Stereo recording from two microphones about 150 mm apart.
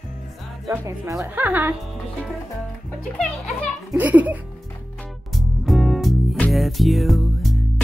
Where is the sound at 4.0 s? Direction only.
10° right (ahead or behind).